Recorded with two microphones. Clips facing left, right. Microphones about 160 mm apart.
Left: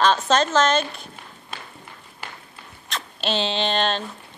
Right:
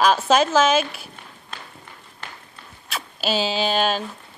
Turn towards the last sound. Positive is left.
turn(degrees=-5)  # may be behind; listen again after turning